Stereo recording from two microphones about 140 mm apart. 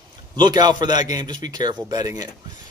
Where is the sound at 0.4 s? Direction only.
30° right (ahead or behind).